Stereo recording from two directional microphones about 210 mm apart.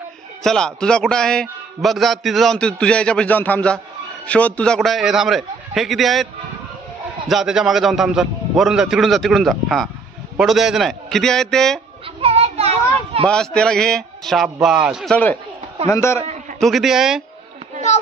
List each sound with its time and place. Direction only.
0.4 s a man's voice: 5° left (ahead or behind)
7.2 s a man's voice: centre (ahead or behind)
12.2 s children playing: 30° right (ahead or behind)
13.3 s a man's voice: 5° left (ahead or behind)
16.2 s a sound: 30° right (ahead or behind)
16.5 s a man's voice: centre (ahead or behind)